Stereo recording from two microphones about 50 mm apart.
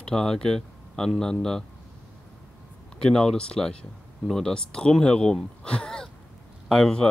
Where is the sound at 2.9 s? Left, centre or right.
Centre.